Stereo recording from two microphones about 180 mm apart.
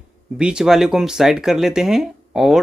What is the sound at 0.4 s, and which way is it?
Speech, 5° right (ahead or behind).